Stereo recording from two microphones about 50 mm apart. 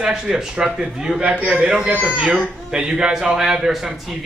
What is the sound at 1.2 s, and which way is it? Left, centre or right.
A man's voice, right.